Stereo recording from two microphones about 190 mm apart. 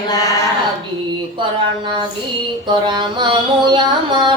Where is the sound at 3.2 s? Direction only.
25° right (ahead or behind).